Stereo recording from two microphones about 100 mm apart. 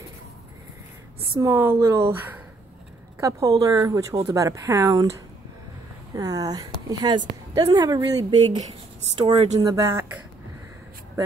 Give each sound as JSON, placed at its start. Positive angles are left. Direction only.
{"t": 1.4, "sound": "speech", "side_deg": -25}
{"t": 3.2, "sound": "a woman's voice", "side_deg": -35}
{"t": 6.1, "sound": "a woman's voice", "side_deg": -40}
{"t": 9.2, "sound": "speech", "side_deg": -50}
{"t": 9.6, "sound": "a woman's voice", "side_deg": -35}